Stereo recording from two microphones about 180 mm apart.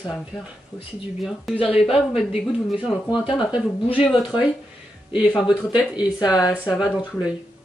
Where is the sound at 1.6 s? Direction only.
30° left (ahead or behind).